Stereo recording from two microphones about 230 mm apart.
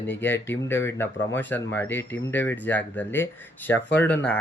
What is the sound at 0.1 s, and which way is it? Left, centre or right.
Speech, centre.